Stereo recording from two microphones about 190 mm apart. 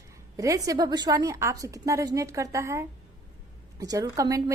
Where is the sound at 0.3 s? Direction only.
15° right (ahead or behind).